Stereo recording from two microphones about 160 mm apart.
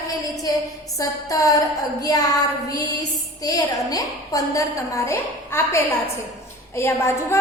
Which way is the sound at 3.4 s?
20° left (ahead or behind).